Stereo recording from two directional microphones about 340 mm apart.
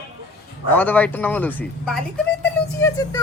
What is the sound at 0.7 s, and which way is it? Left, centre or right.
Speech, centre.